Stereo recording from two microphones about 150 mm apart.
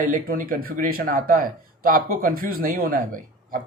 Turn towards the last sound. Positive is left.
turn(degrees=-70)  # may be behind; listen again after turning